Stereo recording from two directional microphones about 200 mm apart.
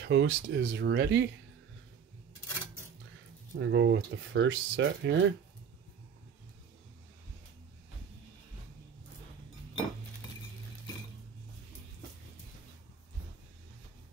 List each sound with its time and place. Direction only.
0.0 s speech: 65° right (ahead or behind)
3.5 s speech: 65° right (ahead or behind)